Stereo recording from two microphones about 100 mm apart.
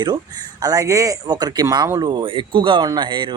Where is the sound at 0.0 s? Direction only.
45° right (ahead or behind).